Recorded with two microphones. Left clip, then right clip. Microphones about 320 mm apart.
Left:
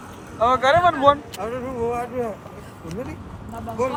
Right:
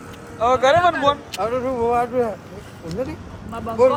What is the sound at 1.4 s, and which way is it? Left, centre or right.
Speech, right.